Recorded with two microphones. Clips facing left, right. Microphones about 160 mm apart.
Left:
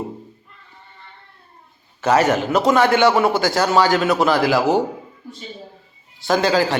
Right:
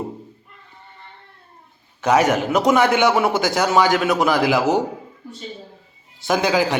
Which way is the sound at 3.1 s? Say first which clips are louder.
Left 2 dB; centre (ahead or behind).